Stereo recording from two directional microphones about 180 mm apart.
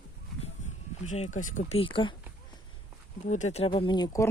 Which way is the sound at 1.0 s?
40° left (ahead or behind).